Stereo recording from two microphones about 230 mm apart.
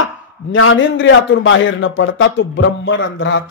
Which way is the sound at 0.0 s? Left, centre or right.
Left.